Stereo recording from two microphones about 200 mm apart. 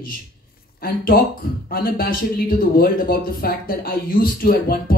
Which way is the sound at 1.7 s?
50° left (ahead or behind).